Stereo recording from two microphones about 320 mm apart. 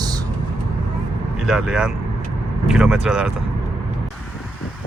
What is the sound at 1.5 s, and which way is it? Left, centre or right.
Speech, centre.